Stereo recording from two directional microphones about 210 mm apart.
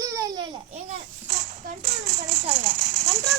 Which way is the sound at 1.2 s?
45° right (ahead or behind).